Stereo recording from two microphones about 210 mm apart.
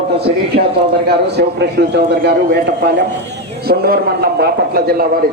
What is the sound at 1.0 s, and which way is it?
A man's voice, 50° right (ahead or behind).